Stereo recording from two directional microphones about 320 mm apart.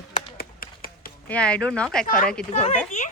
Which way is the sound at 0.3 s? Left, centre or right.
Left.